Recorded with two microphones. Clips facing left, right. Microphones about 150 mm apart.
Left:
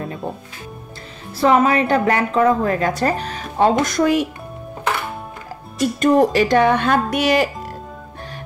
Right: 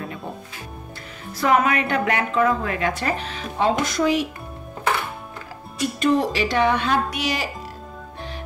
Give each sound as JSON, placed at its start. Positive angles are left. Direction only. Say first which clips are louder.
{"t": 1.3, "sound": "a woman's voice", "louder": "left 4 dB", "side_deg": 30}
{"t": 5.8, "sound": "speech", "louder": "left 6 dB", "side_deg": 45}